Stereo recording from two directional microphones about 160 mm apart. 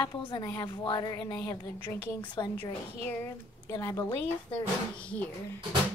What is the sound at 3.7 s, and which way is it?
Speech, 20° left (ahead or behind).